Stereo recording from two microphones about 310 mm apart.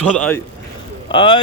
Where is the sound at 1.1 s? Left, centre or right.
Centre.